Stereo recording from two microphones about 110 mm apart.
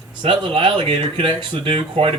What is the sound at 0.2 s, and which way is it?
Speech, 45° right (ahead or behind).